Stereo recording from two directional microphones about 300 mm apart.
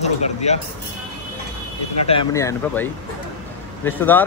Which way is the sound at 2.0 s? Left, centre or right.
Centre.